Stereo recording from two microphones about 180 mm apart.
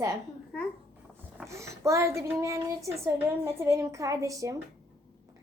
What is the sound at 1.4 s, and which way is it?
A woman's voice, 15° right (ahead or behind).